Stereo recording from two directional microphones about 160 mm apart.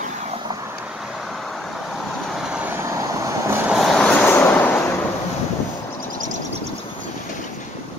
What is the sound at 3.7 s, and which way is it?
Vehicle, centre (ahead or behind).